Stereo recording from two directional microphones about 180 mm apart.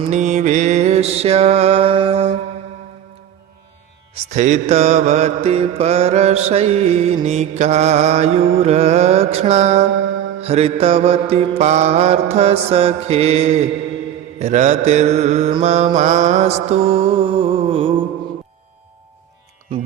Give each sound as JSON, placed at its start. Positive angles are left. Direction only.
{"t": 0.1, "sound": "mantra", "side_deg": -40}
{"t": 4.1, "sound": "mantra", "side_deg": -40}